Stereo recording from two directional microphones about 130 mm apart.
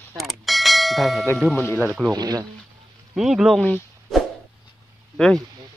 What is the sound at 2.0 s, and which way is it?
Speech, 30° right (ahead or behind).